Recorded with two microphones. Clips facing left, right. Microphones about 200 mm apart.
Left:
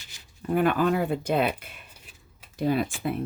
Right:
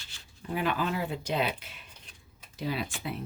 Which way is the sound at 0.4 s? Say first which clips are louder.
Left 8 dB; 50° left (ahead or behind).